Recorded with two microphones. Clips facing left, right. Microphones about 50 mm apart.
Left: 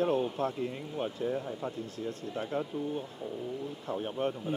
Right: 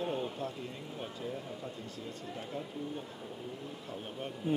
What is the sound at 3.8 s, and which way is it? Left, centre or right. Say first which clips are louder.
Speech: left 10 dB; left.